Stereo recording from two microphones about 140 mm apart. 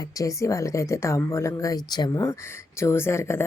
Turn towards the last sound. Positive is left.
turn(degrees=20)  # may be behind; listen again after turning